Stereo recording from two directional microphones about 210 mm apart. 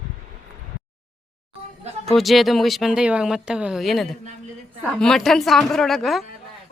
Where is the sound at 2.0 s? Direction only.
Centre (ahead or behind).